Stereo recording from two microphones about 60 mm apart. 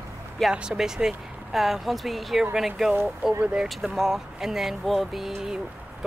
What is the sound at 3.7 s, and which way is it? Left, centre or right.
Speech, centre.